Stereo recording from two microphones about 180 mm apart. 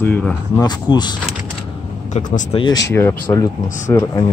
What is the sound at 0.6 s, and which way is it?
Speech, 25° left (ahead or behind).